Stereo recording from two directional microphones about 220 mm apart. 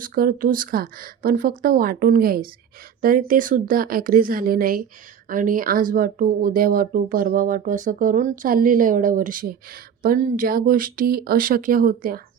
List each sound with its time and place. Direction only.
0.0 s speech: 40° right (ahead or behind)